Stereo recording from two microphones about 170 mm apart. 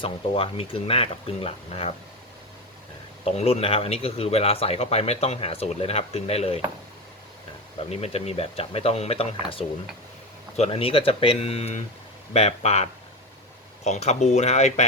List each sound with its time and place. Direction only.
0.0 s speech: 30° left (ahead or behind)
3.2 s speech: 35° left (ahead or behind)
7.9 s speech: 40° left (ahead or behind)
10.6 s speech: 35° left (ahead or behind)